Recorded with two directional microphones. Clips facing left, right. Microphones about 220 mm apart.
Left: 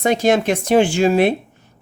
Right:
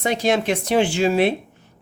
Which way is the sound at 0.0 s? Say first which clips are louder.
Left 4 dB; 45° left (ahead or behind).